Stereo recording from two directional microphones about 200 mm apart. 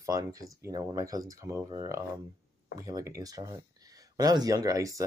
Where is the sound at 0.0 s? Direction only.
15° right (ahead or behind).